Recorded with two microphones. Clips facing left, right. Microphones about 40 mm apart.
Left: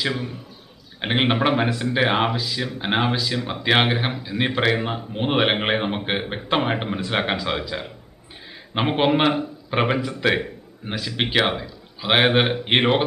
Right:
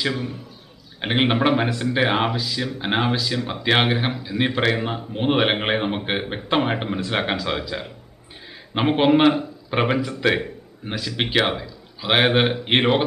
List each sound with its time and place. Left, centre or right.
0.0 s speech: centre